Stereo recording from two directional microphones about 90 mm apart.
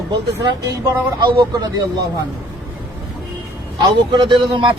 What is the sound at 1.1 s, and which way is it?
Speech, 65° right (ahead or behind).